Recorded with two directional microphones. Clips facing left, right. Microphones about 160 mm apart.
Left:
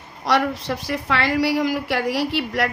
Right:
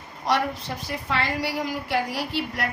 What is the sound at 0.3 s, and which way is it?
A woman's voice, 90° left.